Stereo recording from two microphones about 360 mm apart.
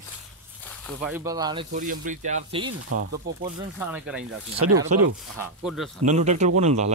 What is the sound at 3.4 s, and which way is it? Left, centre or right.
Speech, centre.